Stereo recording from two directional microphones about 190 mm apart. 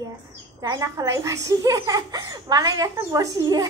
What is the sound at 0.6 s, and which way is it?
A child's voice, 20° right (ahead or behind).